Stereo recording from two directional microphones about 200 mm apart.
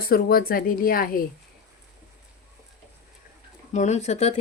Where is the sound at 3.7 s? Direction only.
35° left (ahead or behind).